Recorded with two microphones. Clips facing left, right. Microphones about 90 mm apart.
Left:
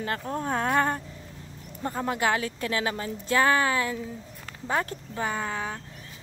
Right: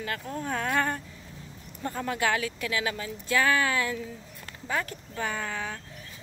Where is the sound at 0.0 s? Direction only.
35° left (ahead or behind).